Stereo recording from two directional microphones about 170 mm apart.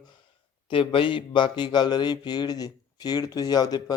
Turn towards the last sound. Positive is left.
turn(degrees=25)  # may be behind; listen again after turning